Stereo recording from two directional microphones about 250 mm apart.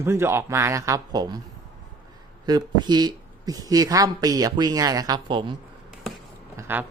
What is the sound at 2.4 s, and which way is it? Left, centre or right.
Speech, centre.